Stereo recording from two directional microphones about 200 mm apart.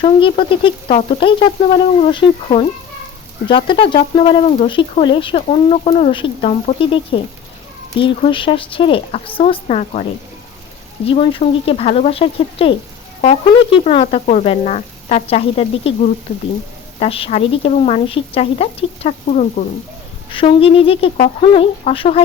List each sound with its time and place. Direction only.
0.0 s speech: 25° left (ahead or behind)
11.0 s speech: 25° left (ahead or behind)
17.0 s speech: 30° left (ahead or behind)